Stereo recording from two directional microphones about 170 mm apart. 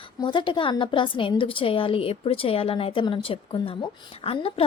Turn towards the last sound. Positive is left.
turn(degrees=35)  # may be behind; listen again after turning